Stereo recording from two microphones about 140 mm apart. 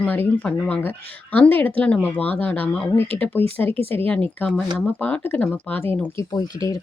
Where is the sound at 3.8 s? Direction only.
15° left (ahead or behind).